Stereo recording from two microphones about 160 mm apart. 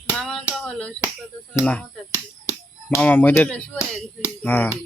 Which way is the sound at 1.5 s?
10° left (ahead or behind).